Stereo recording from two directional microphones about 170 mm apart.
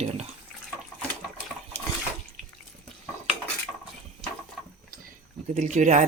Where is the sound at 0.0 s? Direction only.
40° right (ahead or behind).